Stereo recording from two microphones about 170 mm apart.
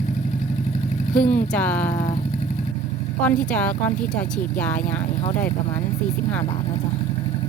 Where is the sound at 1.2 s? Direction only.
50° left (ahead or behind).